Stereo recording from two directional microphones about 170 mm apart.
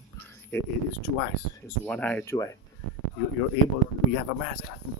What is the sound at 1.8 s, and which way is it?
Speech, 10° left (ahead or behind).